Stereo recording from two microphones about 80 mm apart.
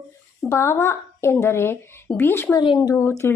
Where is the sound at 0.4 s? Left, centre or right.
Left.